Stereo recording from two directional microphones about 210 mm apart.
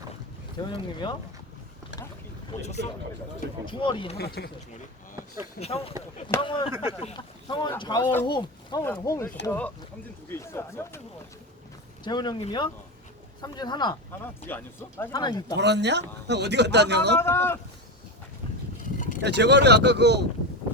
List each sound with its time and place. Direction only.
0.7 s speech: 25° left (ahead or behind)
2.5 s speech: 35° left (ahead or behind)
3.7 s speech: 25° left (ahead or behind)
5.5 s speech: 30° left (ahead or behind)
8.0 s speech: 10° left (ahead or behind)
8.3 s speech: 20° left (ahead or behind)
12.0 s speech: 20° left (ahead or behind)
14.4 s speech: 10° left (ahead or behind)
15.5 s speech: 55° right (ahead or behind)
17.2 s speech: 10° left (ahead or behind)
18.9 s vehicle: 40° left (ahead or behind)
19.2 s speech: 55° right (ahead or behind)